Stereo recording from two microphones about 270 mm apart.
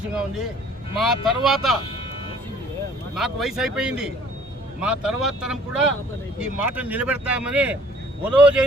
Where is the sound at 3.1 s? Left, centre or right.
Centre.